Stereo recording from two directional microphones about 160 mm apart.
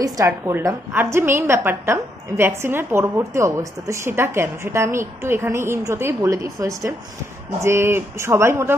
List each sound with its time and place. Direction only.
0.0 s a woman's voice: 20° right (ahead or behind)